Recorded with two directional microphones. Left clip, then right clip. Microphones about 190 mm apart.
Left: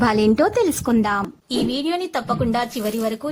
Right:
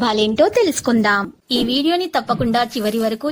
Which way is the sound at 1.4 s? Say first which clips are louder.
Right 6 dB; 25° right (ahead or behind).